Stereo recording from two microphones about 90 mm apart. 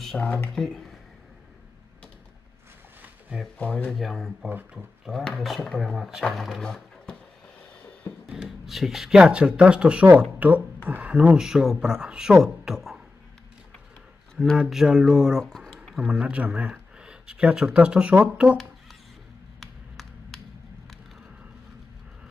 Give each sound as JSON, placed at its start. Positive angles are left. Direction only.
{"t": 0.2, "sound": "speech", "side_deg": 20}
{"t": 0.6, "sound": "speech", "side_deg": 5}
{"t": 3.5, "sound": "speech", "side_deg": 15}
{"t": 3.9, "sound": "speech", "side_deg": 0}
{"t": 8.3, "sound": "speech", "side_deg": -5}
{"t": 14.6, "sound": "speech", "side_deg": -5}
{"t": 15.4, "sound": "a sound", "side_deg": 5}
{"t": 16.0, "sound": "speech", "side_deg": -10}
{"t": 19.6, "sound": "a sound", "side_deg": 0}